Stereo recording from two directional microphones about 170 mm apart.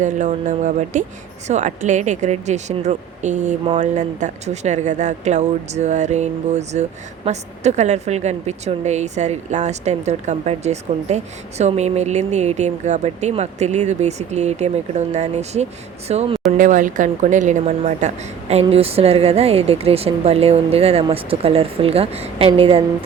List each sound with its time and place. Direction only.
0.0 s a woman's voice: 45° right (ahead or behind)
16.6 s a woman's voice: 50° right (ahead or behind); by 22.8 s 35° right (ahead or behind)